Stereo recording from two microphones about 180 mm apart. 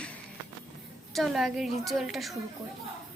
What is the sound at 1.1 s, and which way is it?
A woman's voice, centre (ahead or behind).